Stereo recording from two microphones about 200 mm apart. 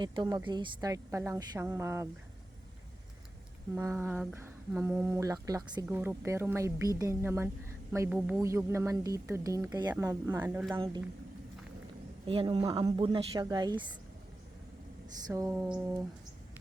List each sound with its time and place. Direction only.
0.0 s a woman's voice: 25° right (ahead or behind)
3.8 s speech: 10° right (ahead or behind)
10.7 s a woman's voice: 20° right (ahead or behind)
12.2 s a woman's voice: 25° right (ahead or behind)
15.3 s speech: 15° right (ahead or behind)